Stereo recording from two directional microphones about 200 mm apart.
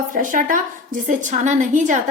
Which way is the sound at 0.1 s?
40° right (ahead or behind).